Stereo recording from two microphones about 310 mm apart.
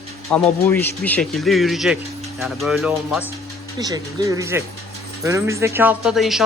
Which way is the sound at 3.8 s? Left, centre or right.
Centre.